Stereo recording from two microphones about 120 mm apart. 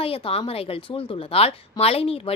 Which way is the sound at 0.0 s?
50° left (ahead or behind).